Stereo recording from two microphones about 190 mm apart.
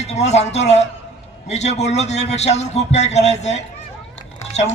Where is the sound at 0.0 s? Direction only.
35° left (ahead or behind).